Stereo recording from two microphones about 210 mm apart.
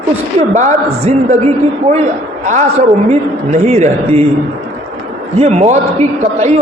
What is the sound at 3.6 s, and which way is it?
Speech, 35° right (ahead or behind).